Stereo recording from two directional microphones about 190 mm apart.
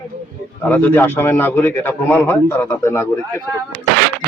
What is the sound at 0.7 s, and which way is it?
A man's voice, 10° left (ahead or behind).